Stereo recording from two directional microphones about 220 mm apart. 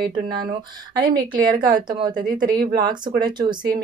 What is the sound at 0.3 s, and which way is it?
Speech, 20° right (ahead or behind).